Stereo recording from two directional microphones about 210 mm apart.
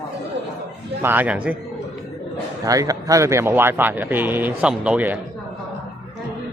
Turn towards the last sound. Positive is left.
turn(degrees=-5)  # may be behind; listen again after turning